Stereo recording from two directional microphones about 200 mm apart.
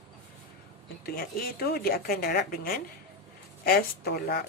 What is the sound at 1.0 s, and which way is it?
A woman's voice, 50° left (ahead or behind).